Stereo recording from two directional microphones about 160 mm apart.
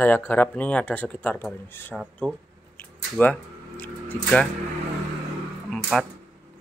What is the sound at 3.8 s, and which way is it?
Speech, 10° left (ahead or behind).